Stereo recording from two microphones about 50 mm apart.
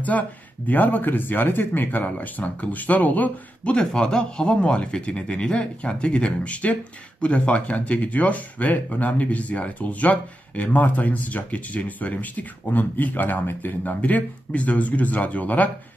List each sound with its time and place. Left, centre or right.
0.1 s speech: left
3.8 s speech: centre; by 15.7 s left